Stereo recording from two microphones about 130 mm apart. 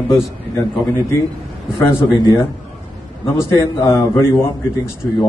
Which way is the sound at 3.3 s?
20° left (ahead or behind).